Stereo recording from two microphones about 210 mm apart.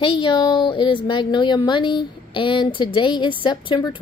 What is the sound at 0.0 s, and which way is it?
A woman's voice, 25° left (ahead or behind).